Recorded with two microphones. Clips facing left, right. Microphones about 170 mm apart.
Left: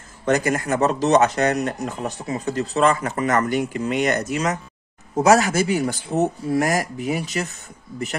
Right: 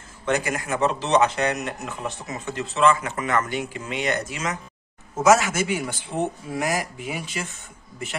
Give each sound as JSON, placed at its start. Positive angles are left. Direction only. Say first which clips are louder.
{"t": 0.2, "sound": "speech", "louder": "left 5 dB", "side_deg": 40}